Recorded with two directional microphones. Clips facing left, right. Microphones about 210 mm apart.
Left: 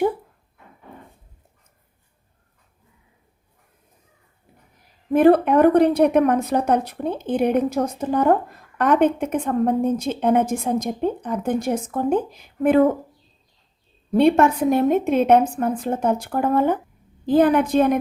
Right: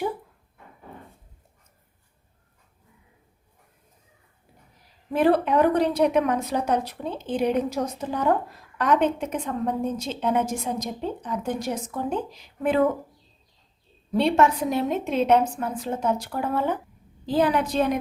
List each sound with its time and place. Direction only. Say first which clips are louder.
5.1 s a woman's voice: left 6 dB; 50° left (ahead or behind)
14.1 s a woman's voice: left 5 dB; 50° left (ahead or behind)